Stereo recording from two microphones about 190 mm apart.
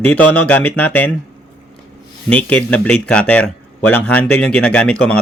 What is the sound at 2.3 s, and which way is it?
Speech, 5° left (ahead or behind).